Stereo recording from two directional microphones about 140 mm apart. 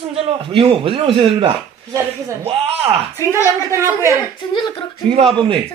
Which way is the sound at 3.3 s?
20° right (ahead or behind).